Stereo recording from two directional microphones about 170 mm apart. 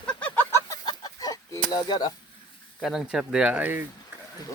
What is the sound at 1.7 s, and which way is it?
Speech, 25° left (ahead or behind).